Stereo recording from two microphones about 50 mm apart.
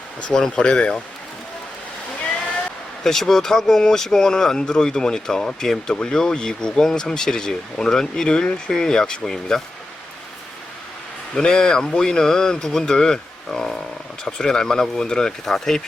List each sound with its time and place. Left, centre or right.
0.5 s speech: centre
3.0 s speech: centre
11.3 s speech: centre